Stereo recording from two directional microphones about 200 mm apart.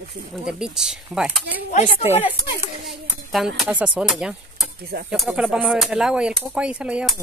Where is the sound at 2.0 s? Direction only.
10° right (ahead or behind).